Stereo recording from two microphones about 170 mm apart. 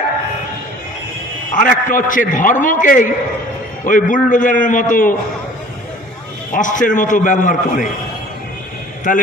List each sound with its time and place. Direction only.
1.5 s a man's voice: 55° left (ahead or behind)
6.5 s a man's voice: 50° left (ahead or behind)
9.1 s a man's voice: 50° left (ahead or behind)